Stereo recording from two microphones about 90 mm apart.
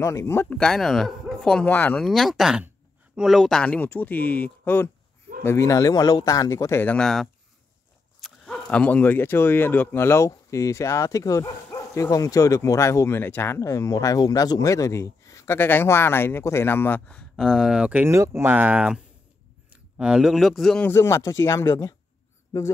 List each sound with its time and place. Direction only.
0.0 s speech: 35° left (ahead or behind)
0.6 s speech: 5° left (ahead or behind)
1.7 s speech: 20° left (ahead or behind)
2.0 s speech: 5° left (ahead or behind)
3.6 s speech: 15° left (ahead or behind)
5.7 s speech: 45° left (ahead or behind)
7.0 s speech: 5° left (ahead or behind)
8.5 s speech: 15° left (ahead or behind)
13.6 s speech: 35° left (ahead or behind)
17.4 s speech: centre (ahead or behind)
17.9 s a man's voice: 30° right (ahead or behind); by 20.8 s 5° left (ahead or behind)
20.8 s speech: 30° left (ahead or behind)